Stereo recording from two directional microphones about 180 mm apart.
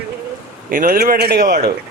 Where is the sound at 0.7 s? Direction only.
50° right (ahead or behind).